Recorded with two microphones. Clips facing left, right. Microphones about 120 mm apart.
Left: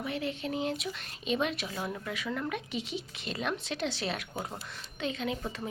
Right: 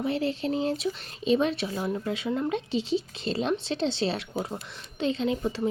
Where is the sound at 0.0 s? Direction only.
30° right (ahead or behind).